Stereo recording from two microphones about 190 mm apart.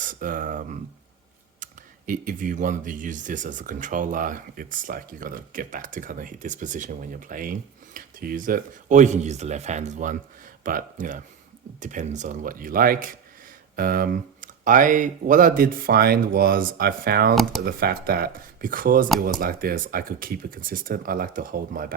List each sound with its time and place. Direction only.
0.0 s speech: 45° right (ahead or behind)